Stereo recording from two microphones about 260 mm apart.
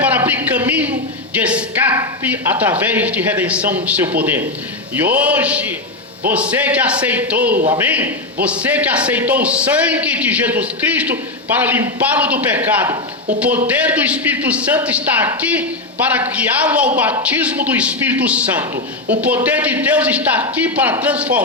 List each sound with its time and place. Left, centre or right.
0.0 s a man's voice: centre